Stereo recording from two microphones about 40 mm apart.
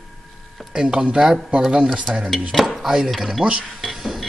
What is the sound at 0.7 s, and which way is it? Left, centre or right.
Speech, right.